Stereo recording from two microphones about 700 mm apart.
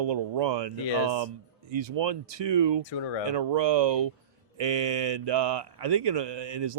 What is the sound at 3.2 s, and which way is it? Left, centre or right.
Speech, right.